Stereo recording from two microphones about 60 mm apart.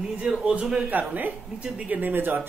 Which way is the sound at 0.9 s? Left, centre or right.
Right.